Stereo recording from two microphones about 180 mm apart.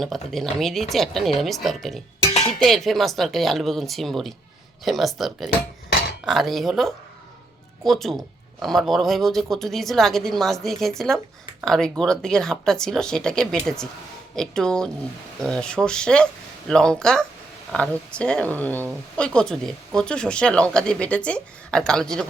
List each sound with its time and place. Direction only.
0.0 s speech: centre (ahead or behind)
2.2 s dishes: 35° left (ahead or behind)
2.6 s speech: centre (ahead or behind)